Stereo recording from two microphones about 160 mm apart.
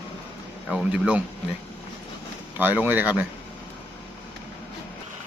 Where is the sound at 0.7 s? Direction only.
5° right (ahead or behind).